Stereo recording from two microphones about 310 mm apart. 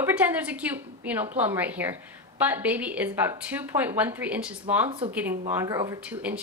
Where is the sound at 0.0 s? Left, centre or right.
Centre.